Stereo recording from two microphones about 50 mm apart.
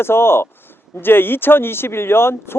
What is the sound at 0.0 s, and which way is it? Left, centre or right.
Speech, left.